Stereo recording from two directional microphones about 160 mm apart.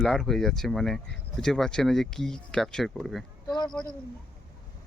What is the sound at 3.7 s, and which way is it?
Speech, 10° left (ahead or behind).